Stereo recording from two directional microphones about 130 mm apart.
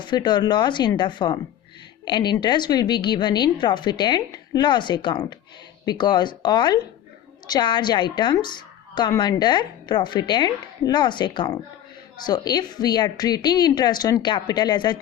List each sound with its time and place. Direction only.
0.0 s a woman's voice: 35° left (ahead or behind)